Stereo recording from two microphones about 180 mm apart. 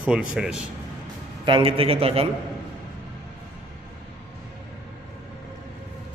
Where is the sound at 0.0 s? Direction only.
5° right (ahead or behind).